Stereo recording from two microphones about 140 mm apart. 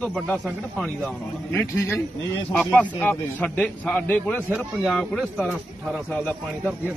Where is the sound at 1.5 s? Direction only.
20° left (ahead or behind).